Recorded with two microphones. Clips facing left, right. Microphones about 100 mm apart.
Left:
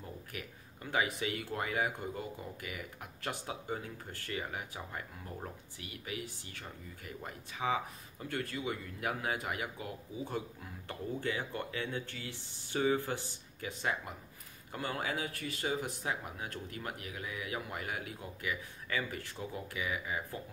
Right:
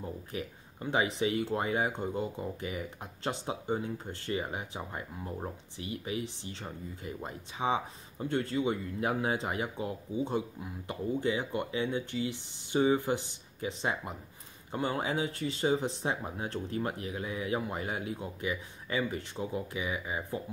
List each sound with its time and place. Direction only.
0.0 s speech: 25° right (ahead or behind)